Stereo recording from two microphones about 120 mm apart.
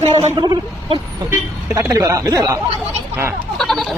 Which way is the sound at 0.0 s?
65° right (ahead or behind).